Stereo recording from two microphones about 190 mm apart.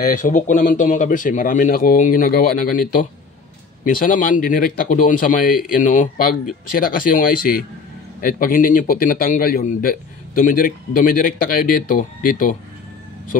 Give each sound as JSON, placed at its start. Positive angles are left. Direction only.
{"t": 0.0, "sound": "speech", "side_deg": 40}